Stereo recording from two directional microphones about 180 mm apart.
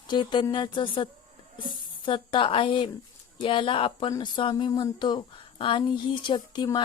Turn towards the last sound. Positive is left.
turn(degrees=25)  # may be behind; listen again after turning